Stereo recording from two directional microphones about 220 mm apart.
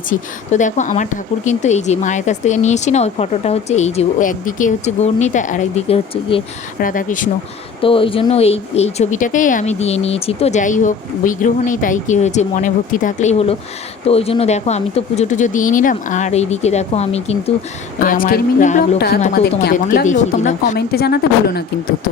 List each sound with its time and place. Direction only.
0.1 s a woman's voice: 35° left (ahead or behind)
6.7 s a woman's voice: 40° left (ahead or behind)
7.8 s a woman's voice: 25° left (ahead or behind)
18.0 s a woman's voice: 40° left (ahead or behind)
20.7 s a woman's voice: 45° left (ahead or behind)